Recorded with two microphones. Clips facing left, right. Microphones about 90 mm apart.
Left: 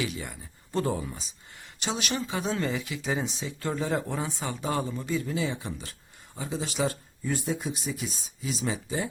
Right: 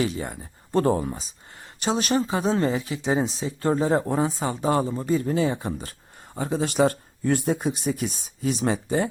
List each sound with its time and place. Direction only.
0.0 s speech: 40° right (ahead or behind)
6.3 s speech: 55° right (ahead or behind)